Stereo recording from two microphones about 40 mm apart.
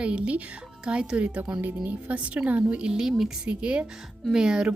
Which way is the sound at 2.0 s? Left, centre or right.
Right.